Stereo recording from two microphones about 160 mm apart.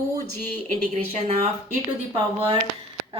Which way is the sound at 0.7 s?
40° right (ahead or behind).